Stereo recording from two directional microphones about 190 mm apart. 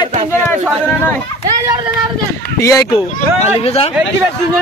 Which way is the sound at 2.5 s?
15° left (ahead or behind).